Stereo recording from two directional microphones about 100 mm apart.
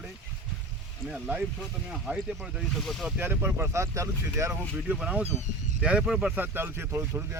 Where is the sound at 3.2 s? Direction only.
25° right (ahead or behind).